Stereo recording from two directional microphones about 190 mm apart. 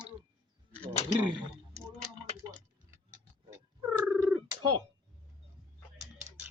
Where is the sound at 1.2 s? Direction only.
25° right (ahead or behind).